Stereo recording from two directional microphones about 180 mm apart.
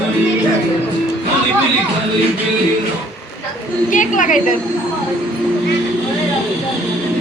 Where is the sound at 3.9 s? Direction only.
45° left (ahead or behind).